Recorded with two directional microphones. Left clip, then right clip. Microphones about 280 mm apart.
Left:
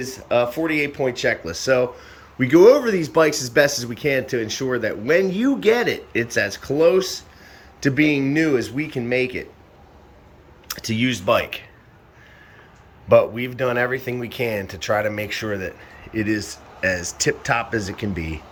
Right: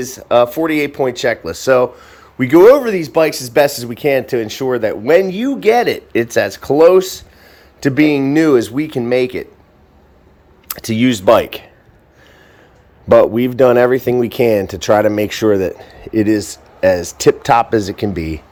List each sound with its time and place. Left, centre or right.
0.0 s speech: centre
10.7 s speech: centre
13.1 s speech: right